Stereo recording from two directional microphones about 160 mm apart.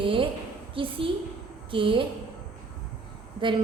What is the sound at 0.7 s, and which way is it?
A woman's voice, 35° right (ahead or behind).